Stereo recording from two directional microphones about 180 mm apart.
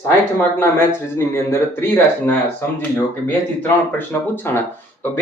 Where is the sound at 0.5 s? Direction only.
15° left (ahead or behind).